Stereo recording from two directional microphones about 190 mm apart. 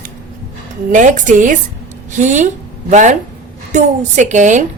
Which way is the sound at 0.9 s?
40° right (ahead or behind).